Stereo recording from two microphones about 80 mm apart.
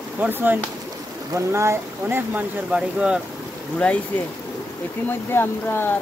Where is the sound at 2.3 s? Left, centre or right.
Centre.